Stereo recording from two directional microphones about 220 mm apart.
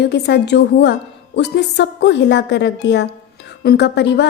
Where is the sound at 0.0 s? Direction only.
50° left (ahead or behind).